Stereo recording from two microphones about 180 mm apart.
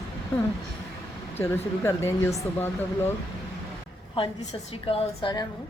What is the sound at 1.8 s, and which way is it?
Speech, 15° left (ahead or behind).